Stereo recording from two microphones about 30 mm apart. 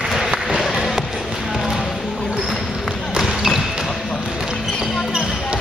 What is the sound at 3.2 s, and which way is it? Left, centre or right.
Basketball bounce, centre.